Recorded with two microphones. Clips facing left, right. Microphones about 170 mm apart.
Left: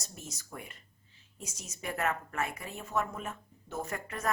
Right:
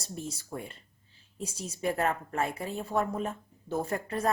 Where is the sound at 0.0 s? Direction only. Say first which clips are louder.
Right 8 dB; 30° right (ahead or behind).